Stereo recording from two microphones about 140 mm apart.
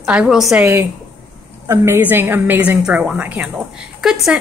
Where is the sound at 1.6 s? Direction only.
15° right (ahead or behind).